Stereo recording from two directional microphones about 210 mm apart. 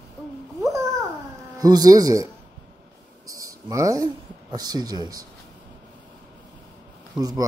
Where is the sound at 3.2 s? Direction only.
15° right (ahead or behind).